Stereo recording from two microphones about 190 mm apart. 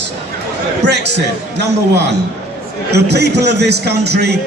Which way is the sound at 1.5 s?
60° right (ahead or behind).